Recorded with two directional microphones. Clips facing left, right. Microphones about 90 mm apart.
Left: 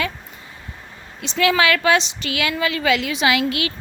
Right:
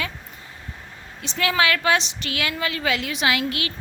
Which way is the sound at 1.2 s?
90° left.